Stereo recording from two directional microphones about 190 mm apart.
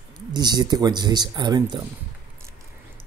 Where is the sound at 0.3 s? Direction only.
20° right (ahead or behind).